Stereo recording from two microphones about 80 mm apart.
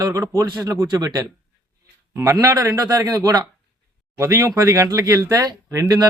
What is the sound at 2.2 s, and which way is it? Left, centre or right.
Speech, right.